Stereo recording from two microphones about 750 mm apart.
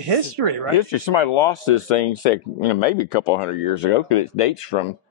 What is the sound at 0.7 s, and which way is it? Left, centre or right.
Speech, left.